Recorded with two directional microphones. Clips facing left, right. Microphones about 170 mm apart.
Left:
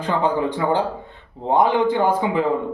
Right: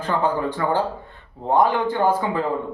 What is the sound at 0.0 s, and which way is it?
A man's voice, 15° left (ahead or behind).